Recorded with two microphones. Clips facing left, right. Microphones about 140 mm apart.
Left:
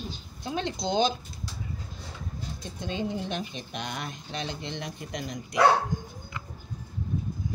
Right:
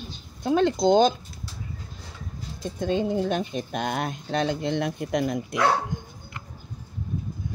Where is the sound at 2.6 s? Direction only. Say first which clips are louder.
Right 8 dB; 50° right (ahead or behind).